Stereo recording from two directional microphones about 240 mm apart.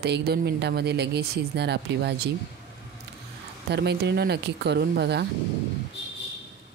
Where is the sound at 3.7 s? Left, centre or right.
Right.